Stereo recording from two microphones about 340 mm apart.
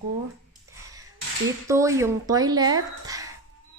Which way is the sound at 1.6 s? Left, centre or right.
Centre.